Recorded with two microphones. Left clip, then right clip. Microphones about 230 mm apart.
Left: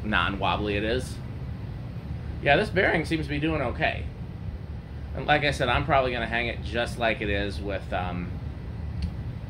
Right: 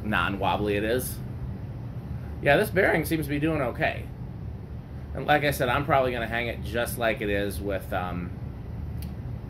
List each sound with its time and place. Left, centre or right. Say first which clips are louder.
0.0 s speech: left 1 dB; centre
2.4 s speech: even; centre
5.1 s speech: even; centre